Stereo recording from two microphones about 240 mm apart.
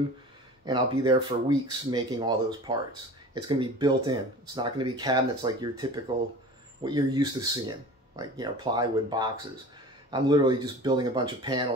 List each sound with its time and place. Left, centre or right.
0.7 s speech: centre